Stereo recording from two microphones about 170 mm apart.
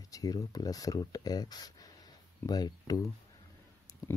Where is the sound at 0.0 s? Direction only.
20° left (ahead or behind).